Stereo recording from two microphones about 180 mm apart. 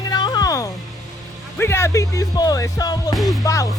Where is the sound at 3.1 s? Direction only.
Centre (ahead or behind).